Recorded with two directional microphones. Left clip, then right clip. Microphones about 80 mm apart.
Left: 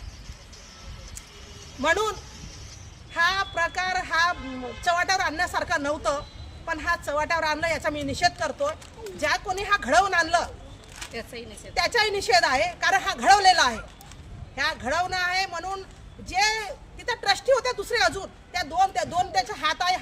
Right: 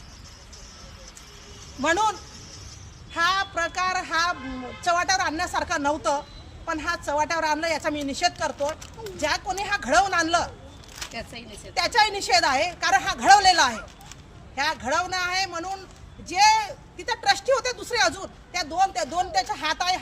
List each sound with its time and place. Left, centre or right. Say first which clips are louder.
1.8 s speech: right 1 dB; left
3.1 s speech: even; left
11.1 s speech: left 3 dB; left
11.7 s speech: right 2 dB; left